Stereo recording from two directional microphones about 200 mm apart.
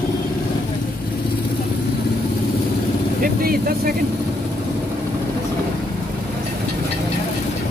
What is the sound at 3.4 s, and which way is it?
Vehicle, 45° right (ahead or behind).